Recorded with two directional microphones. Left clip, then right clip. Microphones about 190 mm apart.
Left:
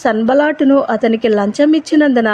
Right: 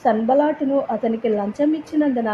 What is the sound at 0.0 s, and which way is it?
A woman's voice, 35° left (ahead or behind).